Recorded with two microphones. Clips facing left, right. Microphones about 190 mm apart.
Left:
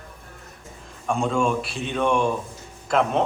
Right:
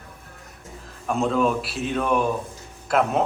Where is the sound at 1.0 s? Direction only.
5° right (ahead or behind).